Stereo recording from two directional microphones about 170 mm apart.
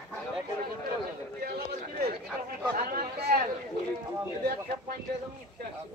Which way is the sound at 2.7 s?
55° right (ahead or behind).